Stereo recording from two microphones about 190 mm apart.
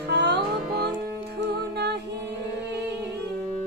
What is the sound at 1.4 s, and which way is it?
Music, 60° right (ahead or behind).